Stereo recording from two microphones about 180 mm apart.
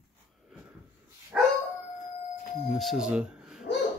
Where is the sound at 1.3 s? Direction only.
5° right (ahead or behind).